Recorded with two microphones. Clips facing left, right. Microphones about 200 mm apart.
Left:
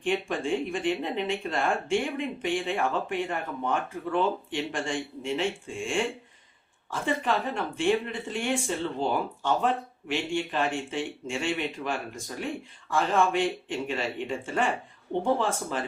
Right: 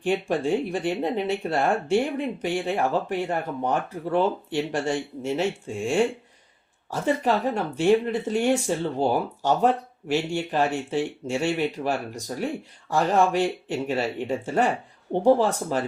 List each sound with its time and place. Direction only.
0.0 s speech: 40° right (ahead or behind)